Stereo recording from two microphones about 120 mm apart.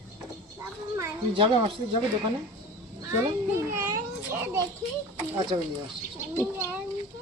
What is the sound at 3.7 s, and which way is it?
Children playing, 20° right (ahead or behind).